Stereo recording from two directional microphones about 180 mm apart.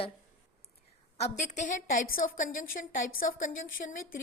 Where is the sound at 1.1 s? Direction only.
40° left (ahead or behind).